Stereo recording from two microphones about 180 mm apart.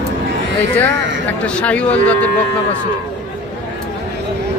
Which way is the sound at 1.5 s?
5° left (ahead or behind).